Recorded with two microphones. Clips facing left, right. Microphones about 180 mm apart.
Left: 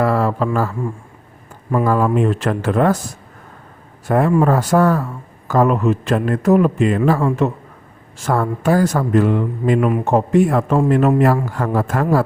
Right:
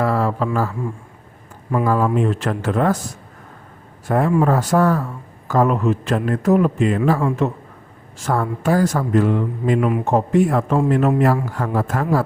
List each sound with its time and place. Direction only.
0.0 s a man's voice: 65° left (ahead or behind)
1.7 s a man's voice: 60° left (ahead or behind)
4.1 s a man's voice: 65° left (ahead or behind)